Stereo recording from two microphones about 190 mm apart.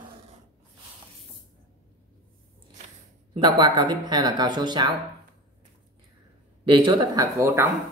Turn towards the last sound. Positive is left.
turn(degrees=-15)  # may be behind; listen again after turning